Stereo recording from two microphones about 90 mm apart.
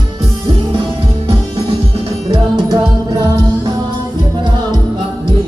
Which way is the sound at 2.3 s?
55° right (ahead or behind).